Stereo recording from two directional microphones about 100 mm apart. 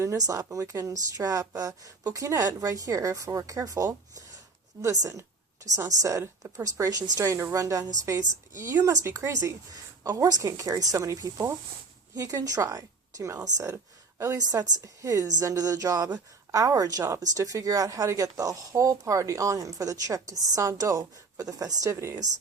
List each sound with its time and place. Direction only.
0.0 s speech: 30° right (ahead or behind)